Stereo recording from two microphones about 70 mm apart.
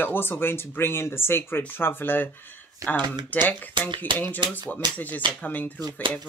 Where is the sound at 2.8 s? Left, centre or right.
Right.